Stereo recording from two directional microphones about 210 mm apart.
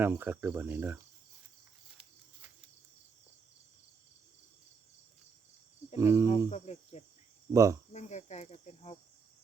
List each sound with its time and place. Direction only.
0.0 s speech: 10° right (ahead or behind)
6.0 s speech: 15° right (ahead or behind)
6.5 s speech: 30° left (ahead or behind)
7.5 s speech: 15° right (ahead or behind)
7.9 s speech: 35° left (ahead or behind)